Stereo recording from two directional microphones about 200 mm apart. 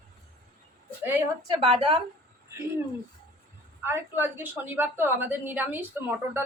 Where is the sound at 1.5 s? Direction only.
25° right (ahead or behind).